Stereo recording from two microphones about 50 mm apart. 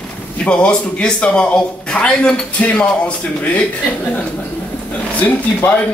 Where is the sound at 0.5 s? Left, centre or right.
Left.